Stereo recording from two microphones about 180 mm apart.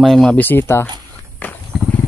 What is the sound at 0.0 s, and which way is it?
Speech, centre (ahead or behind).